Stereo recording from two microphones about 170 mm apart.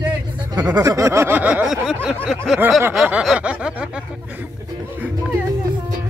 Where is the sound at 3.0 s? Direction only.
5° right (ahead or behind).